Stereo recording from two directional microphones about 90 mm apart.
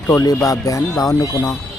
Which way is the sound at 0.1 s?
35° left (ahead or behind).